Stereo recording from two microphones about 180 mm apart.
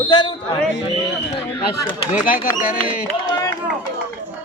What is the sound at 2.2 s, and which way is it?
Speech, 50° left (ahead or behind).